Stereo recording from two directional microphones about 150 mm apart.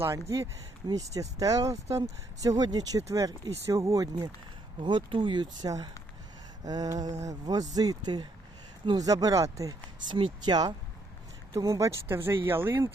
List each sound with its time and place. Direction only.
0.0 s speech: 20° right (ahead or behind)